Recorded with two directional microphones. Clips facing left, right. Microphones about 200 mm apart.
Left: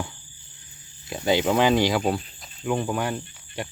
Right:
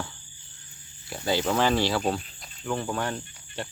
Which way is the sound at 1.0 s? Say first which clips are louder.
Left 4 dB; 20° left (ahead or behind).